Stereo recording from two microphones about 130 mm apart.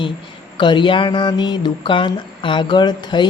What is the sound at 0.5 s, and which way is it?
Speech, 35° left (ahead or behind).